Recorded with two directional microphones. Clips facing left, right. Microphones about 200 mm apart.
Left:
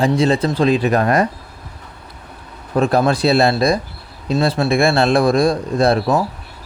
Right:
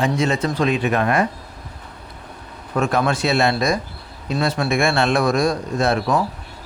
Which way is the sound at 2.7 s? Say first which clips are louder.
Left 4 dB; 35° left (ahead or behind).